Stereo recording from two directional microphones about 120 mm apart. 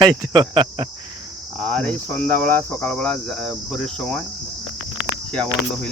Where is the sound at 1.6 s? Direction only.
10° left (ahead or behind).